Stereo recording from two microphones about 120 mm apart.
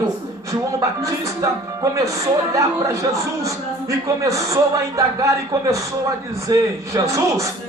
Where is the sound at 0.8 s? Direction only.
25° right (ahead or behind).